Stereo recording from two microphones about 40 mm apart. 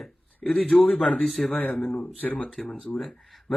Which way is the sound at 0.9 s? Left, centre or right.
Centre.